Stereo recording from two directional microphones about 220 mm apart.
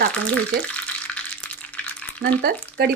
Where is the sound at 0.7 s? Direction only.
5° left (ahead or behind).